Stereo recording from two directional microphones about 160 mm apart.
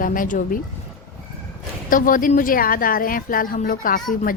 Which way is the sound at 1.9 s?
60° left (ahead or behind).